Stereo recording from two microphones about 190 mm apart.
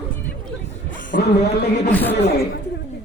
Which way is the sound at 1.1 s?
60° left (ahead or behind).